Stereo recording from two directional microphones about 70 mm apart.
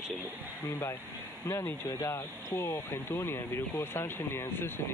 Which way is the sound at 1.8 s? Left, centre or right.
Left.